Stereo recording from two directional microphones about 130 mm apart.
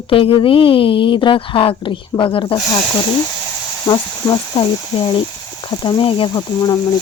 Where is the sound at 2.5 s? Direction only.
30° left (ahead or behind).